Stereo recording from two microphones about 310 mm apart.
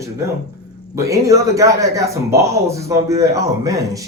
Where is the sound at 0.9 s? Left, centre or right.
Centre.